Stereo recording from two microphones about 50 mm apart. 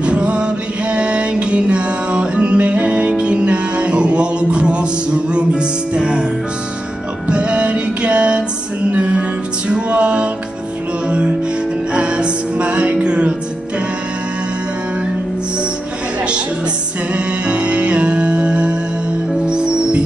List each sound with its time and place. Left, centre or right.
0.0 s music: right
7.2 s music: right
17.1 s music: right